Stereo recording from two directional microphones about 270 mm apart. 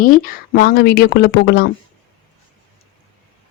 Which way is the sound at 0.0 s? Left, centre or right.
Left.